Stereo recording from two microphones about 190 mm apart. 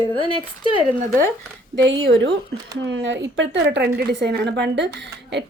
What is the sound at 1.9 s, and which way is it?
A woman's voice, 75° right (ahead or behind).